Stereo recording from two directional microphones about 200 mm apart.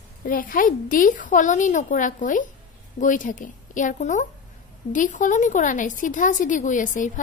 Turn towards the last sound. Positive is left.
turn(degrees=40)  # may be behind; listen again after turning